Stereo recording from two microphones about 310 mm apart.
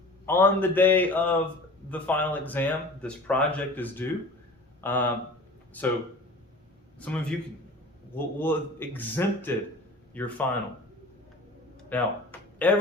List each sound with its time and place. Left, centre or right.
0.3 s speech: centre
7.0 s speech: centre
11.8 s a sound: centre